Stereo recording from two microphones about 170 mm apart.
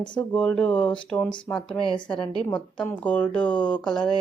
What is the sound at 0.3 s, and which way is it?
Speech, 5° left (ahead or behind).